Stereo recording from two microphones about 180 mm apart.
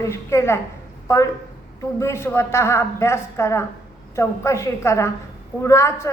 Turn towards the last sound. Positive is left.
turn(degrees=15)  # may be behind; listen again after turning